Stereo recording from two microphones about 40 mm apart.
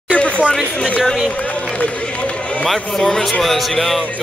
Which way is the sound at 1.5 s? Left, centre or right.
Left.